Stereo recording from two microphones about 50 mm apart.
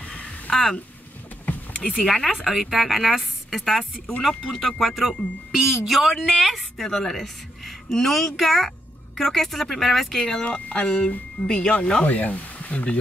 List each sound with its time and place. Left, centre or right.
0.0 s a sound: centre
1.4 s vehicle: left
1.8 s speech: left
2.0 s speech: centre
10.3 s speech: left
12.1 s speech: left